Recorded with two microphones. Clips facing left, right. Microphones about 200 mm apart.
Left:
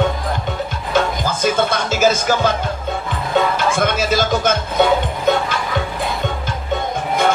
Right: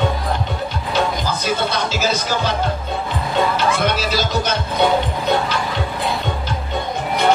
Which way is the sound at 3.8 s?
50° left (ahead or behind).